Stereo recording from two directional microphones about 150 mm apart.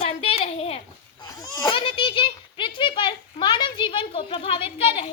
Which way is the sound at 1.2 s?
30° left (ahead or behind).